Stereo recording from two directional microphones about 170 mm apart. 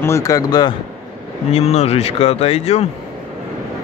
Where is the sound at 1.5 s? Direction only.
40° left (ahead or behind).